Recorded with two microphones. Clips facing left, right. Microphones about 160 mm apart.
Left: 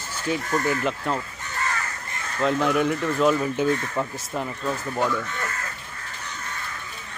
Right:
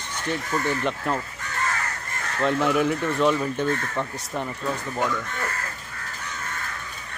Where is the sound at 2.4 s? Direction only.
Centre (ahead or behind).